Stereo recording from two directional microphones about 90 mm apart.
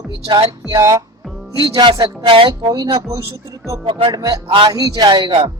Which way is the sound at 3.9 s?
70° right (ahead or behind).